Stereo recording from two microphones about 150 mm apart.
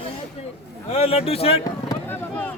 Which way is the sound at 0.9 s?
40° left (ahead or behind).